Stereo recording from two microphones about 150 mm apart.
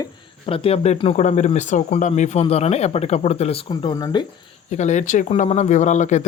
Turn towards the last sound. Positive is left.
turn(degrees=50)  # may be behind; listen again after turning